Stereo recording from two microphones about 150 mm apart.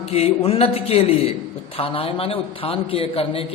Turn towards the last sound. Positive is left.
turn(degrees=40)  # may be behind; listen again after turning